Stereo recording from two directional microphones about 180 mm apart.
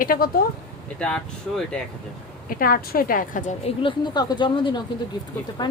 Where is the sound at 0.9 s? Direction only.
5° left (ahead or behind).